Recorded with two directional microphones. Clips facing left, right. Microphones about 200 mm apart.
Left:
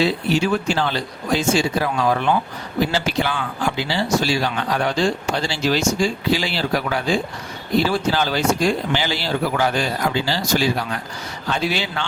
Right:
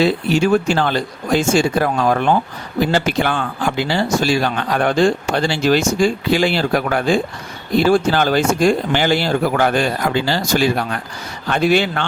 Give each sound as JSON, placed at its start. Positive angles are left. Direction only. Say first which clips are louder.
{"t": 0.0, "sound": "a man's voice", "louder": "right 4 dB", "side_deg": -50}